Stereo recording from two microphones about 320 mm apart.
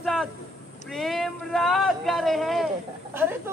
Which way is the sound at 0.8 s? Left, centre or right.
Centre.